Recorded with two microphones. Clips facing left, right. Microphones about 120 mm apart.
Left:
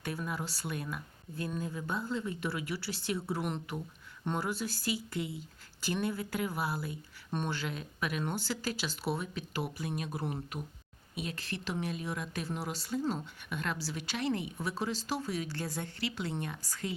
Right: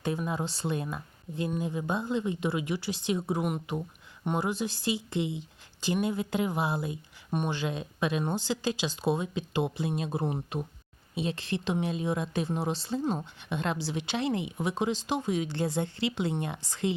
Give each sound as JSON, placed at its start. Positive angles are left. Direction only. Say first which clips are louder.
{"t": 0.0, "sound": "speech", "louder": "right 6 dB", "side_deg": -20}